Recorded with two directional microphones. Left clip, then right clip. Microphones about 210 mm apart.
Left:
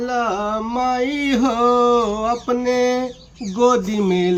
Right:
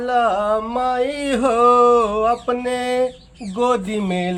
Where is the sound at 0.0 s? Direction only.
30° right (ahead or behind).